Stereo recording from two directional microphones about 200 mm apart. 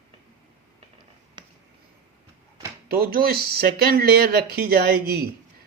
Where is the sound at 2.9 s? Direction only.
50° right (ahead or behind).